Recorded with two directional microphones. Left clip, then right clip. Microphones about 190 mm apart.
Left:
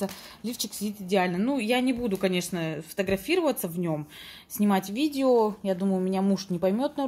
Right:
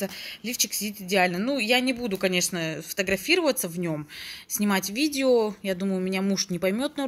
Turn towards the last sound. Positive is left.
turn(degrees=-5)  # may be behind; listen again after turning